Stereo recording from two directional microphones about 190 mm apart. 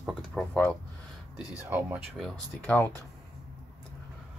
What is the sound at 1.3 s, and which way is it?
Speech, 5° right (ahead or behind).